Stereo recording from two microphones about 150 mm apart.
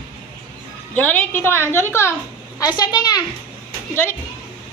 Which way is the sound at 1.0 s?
10° left (ahead or behind).